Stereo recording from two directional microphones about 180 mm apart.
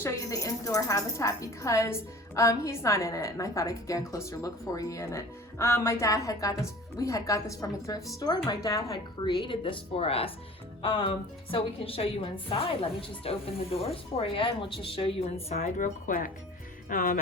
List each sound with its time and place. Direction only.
0.0 s a woman's voice: 15° left (ahead or behind); by 16.3 s 50° left (ahead or behind)
16.9 s music: 50° left (ahead or behind)